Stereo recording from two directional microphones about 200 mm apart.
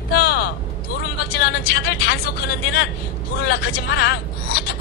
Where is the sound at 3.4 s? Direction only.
55° left (ahead or behind).